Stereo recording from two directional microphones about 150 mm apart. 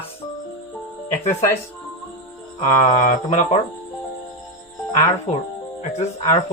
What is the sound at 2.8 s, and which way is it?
Speech, 55° left (ahead or behind).